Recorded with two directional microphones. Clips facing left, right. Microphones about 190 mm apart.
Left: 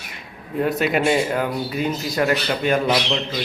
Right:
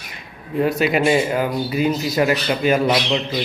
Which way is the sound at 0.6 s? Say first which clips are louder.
Right 2 dB; centre (ahead or behind).